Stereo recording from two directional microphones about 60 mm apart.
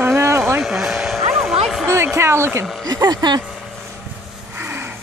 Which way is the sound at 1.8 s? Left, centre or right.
Right.